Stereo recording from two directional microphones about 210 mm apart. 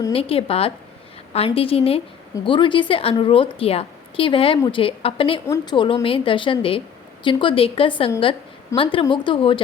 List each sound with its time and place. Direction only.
0.1 s a woman's voice: 25° left (ahead or behind)